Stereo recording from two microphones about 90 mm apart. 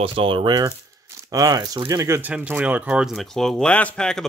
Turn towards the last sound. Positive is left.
turn(degrees=15)  # may be behind; listen again after turning